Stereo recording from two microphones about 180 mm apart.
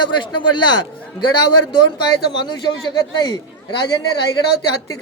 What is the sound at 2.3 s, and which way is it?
A man's voice, 25° left (ahead or behind).